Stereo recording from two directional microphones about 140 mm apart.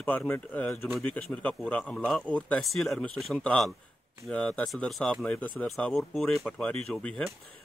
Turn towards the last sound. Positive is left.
turn(degrees=5)  # may be behind; listen again after turning